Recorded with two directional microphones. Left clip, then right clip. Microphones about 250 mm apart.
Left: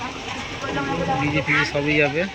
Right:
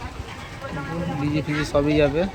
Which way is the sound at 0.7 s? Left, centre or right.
Left.